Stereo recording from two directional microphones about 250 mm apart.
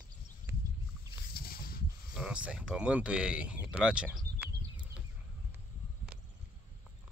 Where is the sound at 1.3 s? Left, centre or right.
Left.